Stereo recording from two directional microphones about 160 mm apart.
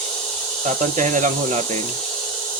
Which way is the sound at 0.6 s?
50° right (ahead or behind).